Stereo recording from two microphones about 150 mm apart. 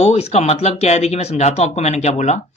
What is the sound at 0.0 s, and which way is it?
Speech, 45° left (ahead or behind).